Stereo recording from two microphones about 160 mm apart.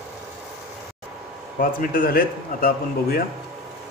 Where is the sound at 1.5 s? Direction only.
60° left (ahead or behind).